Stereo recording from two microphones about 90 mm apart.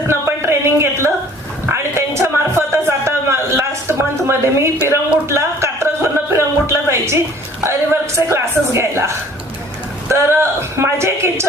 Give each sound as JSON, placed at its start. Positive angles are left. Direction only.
{"t": 0.1, "sound": "a sound", "side_deg": -30}
{"t": 5.3, "sound": "music", "side_deg": -30}
{"t": 7.6, "sound": "a woman's voice", "side_deg": -30}
{"t": 10.8, "sound": "a woman's voice", "side_deg": -30}